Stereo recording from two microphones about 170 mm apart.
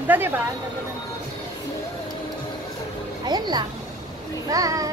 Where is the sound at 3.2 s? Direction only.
25° right (ahead or behind).